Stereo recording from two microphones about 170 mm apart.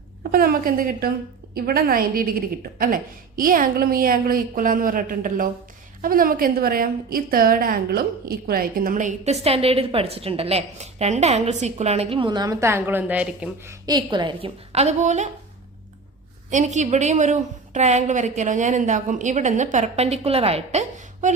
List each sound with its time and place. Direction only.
0.2 s a woman's voice: 60° right (ahead or behind); by 13.7 s 10° right (ahead or behind)
13.8 s a woman's voice: 25° right (ahead or behind); by 15.3 s 40° right (ahead or behind)
16.5 s a woman's voice: 45° right (ahead or behind)